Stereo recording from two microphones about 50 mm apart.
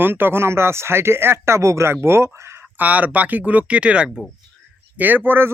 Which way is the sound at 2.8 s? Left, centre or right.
Right.